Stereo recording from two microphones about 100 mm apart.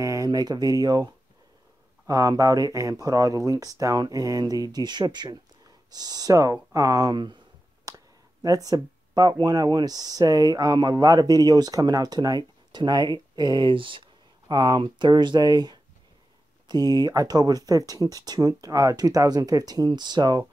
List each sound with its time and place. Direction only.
0.0 s speech: 35° right (ahead or behind)
7.9 s a sound: 35° right (ahead or behind)
8.4 s speech: 40° right (ahead or behind); by 14.0 s 55° right (ahead or behind)
14.5 s speech: 45° right (ahead or behind)